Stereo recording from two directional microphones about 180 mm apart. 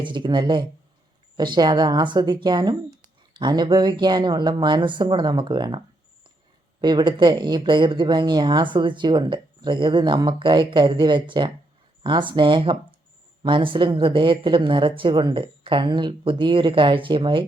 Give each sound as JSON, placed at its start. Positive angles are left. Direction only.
{"t": 0.0, "sound": "speech", "side_deg": -25}
{"t": 6.8, "sound": "speech", "side_deg": -25}